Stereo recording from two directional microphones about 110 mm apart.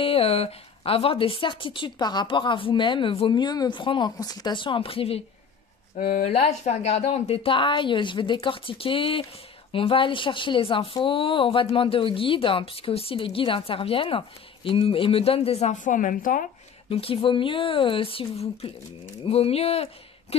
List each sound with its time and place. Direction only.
0.0 s speech: 60° left (ahead or behind)
4.2 s speech: 35° left (ahead or behind); by 5.2 s 60° left (ahead or behind)
6.2 s speech: 80° left
16.9 s speech: 55° left (ahead or behind)